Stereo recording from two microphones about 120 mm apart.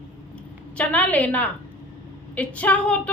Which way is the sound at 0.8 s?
10° left (ahead or behind).